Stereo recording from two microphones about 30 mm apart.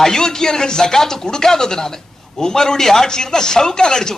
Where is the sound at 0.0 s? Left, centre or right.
Centre.